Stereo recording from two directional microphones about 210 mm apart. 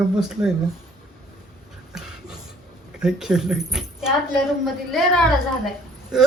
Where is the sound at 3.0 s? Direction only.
5° right (ahead or behind).